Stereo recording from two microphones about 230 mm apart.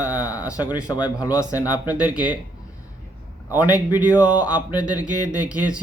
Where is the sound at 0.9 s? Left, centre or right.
Centre.